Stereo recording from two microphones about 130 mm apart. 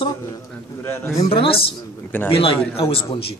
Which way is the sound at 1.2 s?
45° left (ahead or behind).